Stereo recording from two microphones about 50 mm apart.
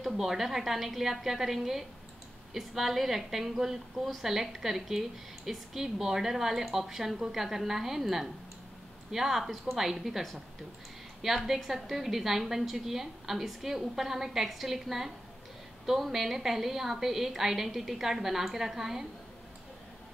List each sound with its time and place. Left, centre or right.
0.0 s a woman's voice: centre